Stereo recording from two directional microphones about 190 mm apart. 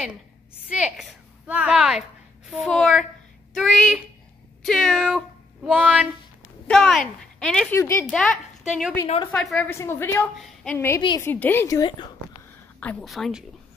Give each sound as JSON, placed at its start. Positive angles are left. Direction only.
{"t": 0.7, "sound": "a woman's voice", "side_deg": -5}
{"t": 5.7, "sound": "a sound", "side_deg": -5}
{"t": 6.7, "sound": "a woman's voice", "side_deg": 0}
{"t": 9.0, "sound": "a woman's voice", "side_deg": 30}
{"t": 9.3, "sound": "a woman's voice", "side_deg": 5}
{"t": 10.3, "sound": "a woman's voice", "side_deg": 0}
{"t": 11.0, "sound": "a woman's voice", "side_deg": 25}
{"t": 11.2, "sound": "a woman's voice", "side_deg": 10}
{"t": 12.8, "sound": "speech", "side_deg": 0}